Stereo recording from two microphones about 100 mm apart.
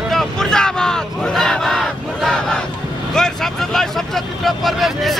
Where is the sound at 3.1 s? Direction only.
5° left (ahead or behind).